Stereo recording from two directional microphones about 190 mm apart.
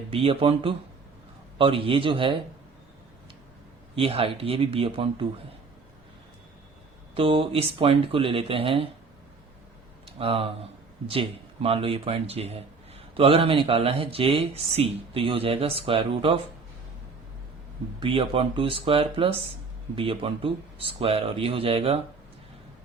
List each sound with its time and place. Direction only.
0.1 s speech: 30° right (ahead or behind)
3.9 s speech: 30° right (ahead or behind)
7.1 s speech: 30° right (ahead or behind)
10.2 s speech: 30° right (ahead or behind)
18.0 s speech: 25° right (ahead or behind)